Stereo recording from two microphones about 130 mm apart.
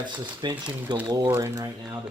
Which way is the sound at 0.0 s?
35° right (ahead or behind).